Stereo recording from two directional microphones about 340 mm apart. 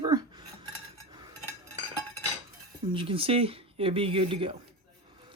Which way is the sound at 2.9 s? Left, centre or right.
Centre.